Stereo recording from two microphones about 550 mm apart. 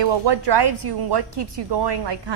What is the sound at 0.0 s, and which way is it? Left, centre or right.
A woman's voice, right.